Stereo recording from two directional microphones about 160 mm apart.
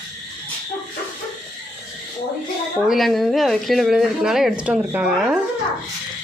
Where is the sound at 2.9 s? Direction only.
Centre (ahead or behind).